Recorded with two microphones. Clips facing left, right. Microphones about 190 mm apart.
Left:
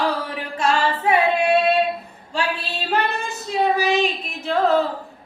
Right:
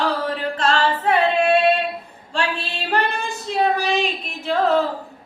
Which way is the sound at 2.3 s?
5° left (ahead or behind).